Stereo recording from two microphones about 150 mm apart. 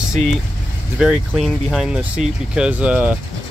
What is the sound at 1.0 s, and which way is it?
Speech, centre (ahead or behind).